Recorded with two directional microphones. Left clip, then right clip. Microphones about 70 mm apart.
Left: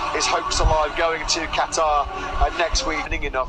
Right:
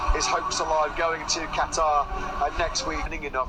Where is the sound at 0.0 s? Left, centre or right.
Left.